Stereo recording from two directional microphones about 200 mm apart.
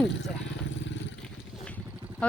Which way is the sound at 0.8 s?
65° left (ahead or behind).